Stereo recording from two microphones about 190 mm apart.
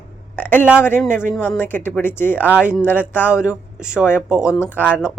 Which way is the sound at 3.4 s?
5° right (ahead or behind).